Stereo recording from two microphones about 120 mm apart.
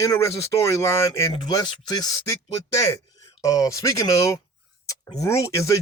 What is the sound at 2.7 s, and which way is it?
A man's voice, 25° left (ahead or behind).